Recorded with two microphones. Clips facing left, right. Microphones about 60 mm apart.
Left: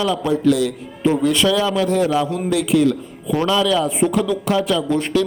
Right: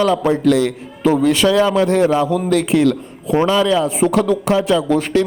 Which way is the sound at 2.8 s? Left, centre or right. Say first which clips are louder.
Right 2 dB; right.